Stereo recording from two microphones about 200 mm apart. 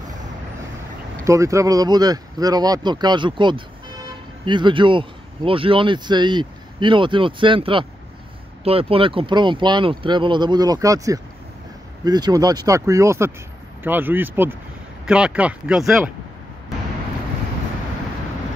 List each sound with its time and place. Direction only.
1.2 s speech: 15° right (ahead or behind)